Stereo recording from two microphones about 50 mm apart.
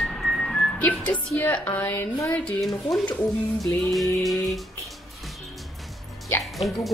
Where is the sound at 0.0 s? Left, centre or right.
Centre.